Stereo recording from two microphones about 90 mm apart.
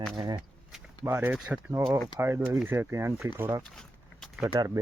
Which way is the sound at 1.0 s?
30° right (ahead or behind).